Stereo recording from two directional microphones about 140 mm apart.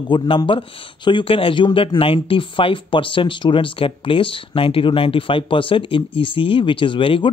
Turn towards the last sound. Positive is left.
turn(degrees=40)  # may be behind; listen again after turning